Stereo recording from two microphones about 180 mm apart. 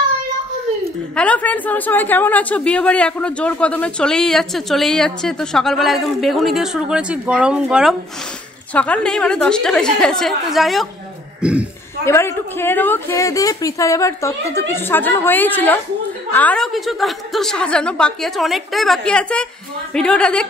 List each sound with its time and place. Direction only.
1.1 s speech: 5° left (ahead or behind)
8.7 s speech: 5° left (ahead or behind)
12.0 s a woman's voice: 15° left (ahead or behind)